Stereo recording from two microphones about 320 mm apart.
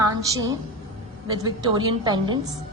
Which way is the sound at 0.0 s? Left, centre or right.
Centre.